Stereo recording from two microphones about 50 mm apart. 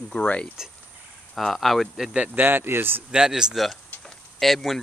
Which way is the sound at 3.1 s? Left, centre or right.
Centre.